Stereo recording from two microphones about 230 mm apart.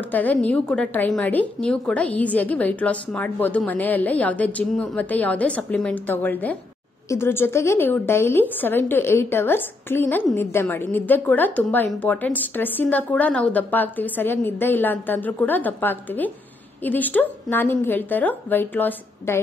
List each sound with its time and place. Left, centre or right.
0.1 s a woman's voice: centre